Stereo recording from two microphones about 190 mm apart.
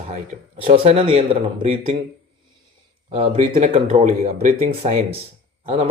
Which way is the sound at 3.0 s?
30° right (ahead or behind).